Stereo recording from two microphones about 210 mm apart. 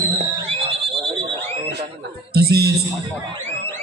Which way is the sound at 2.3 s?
50° right (ahead or behind).